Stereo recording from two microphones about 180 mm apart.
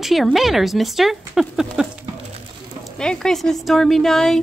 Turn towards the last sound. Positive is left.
turn(degrees=0)  # may be behind; listen again after turning